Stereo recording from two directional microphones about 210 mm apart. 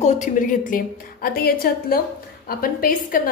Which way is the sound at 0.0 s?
35° left (ahead or behind).